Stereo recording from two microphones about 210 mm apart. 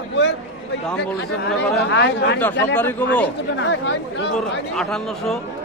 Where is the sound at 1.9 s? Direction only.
55° left (ahead or behind).